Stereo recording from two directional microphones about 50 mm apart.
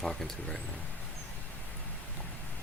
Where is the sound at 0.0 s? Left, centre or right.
Centre.